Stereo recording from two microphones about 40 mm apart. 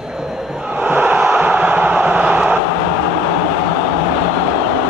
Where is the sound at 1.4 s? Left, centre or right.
Right.